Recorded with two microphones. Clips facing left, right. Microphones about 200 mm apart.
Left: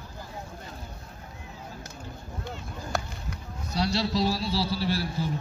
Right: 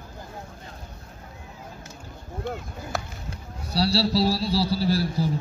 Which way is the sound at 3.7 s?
35° right (ahead or behind).